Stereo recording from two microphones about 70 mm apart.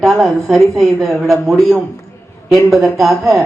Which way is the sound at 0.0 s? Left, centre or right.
Centre.